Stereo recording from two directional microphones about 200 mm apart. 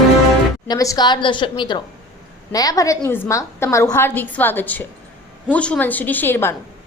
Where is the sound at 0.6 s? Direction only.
15° left (ahead or behind).